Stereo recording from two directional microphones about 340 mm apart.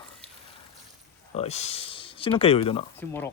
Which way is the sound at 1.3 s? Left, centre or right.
Centre.